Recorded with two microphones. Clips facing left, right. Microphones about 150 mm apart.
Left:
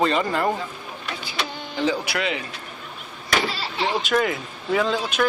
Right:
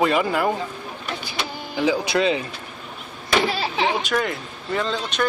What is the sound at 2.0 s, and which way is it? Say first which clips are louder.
Speech: right 6 dB; 25° right (ahead or behind).